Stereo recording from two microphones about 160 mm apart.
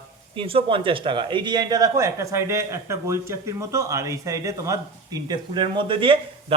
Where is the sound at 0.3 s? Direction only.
35° right (ahead or behind).